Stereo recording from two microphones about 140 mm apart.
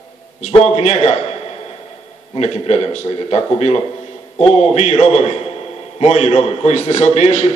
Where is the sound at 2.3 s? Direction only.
50° left (ahead or behind).